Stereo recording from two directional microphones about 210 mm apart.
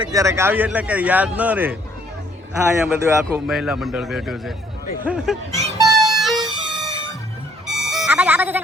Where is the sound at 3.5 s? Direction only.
Centre (ahead or behind).